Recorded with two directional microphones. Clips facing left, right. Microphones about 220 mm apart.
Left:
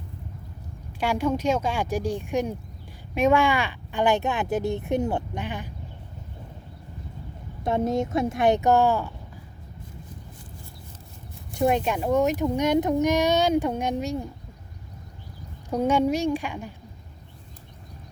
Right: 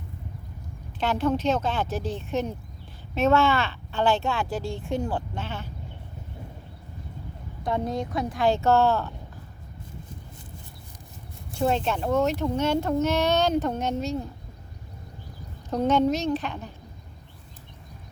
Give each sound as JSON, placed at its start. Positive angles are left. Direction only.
{"t": 0.9, "sound": "speech", "side_deg": 10}
{"t": 7.6, "sound": "speech", "side_deg": 25}
{"t": 11.5, "sound": "speech", "side_deg": 15}
{"t": 15.7, "sound": "speech", "side_deg": 10}